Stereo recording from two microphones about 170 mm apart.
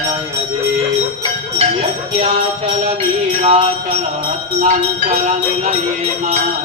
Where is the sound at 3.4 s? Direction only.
35° right (ahead or behind).